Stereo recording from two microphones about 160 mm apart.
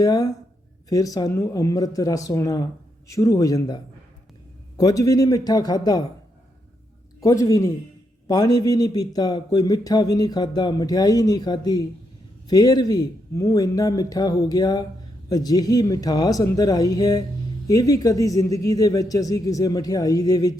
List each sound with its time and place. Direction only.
0.0 s speech: 25° left (ahead or behind)
4.8 s speech: 25° left (ahead or behind)
7.2 s speech: 20° left (ahead or behind)